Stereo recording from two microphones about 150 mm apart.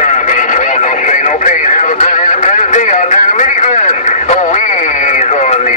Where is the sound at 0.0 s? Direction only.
55° left (ahead or behind).